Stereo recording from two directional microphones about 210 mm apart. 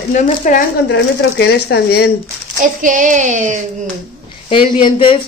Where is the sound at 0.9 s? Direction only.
55° left (ahead or behind).